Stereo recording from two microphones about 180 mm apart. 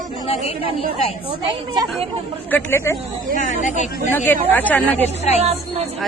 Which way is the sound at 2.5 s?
15° left (ahead or behind).